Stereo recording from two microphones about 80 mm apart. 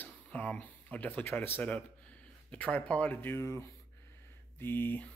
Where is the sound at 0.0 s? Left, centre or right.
Left.